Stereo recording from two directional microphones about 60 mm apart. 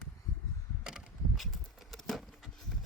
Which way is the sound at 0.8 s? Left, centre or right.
Centre.